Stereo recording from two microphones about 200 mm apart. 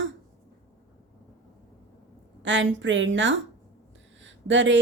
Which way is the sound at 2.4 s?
65° right (ahead or behind).